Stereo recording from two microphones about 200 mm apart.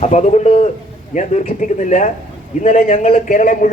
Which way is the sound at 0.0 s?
35° left (ahead or behind).